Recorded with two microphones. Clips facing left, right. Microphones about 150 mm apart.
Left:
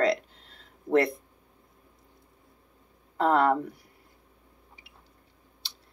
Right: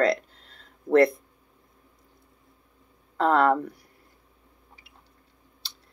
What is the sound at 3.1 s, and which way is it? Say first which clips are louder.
Speech: right 2 dB; 15° left (ahead or behind).